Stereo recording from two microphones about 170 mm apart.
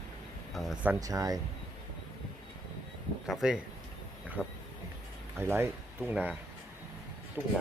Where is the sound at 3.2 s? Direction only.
Centre (ahead or behind).